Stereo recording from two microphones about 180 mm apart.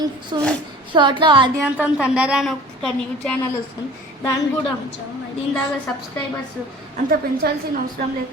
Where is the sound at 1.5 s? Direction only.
10° right (ahead or behind).